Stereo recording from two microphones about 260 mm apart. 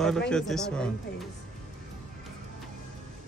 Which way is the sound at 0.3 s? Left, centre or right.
Centre.